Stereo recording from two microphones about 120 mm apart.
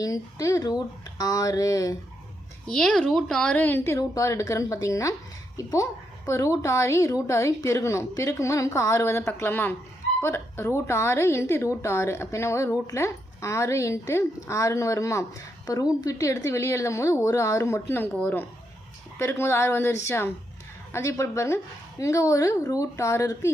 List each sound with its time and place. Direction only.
0.0 s a woman's voice: 30° left (ahead or behind)
2.6 s a woman's voice: 5° left (ahead or behind); by 23.5 s 25° left (ahead or behind)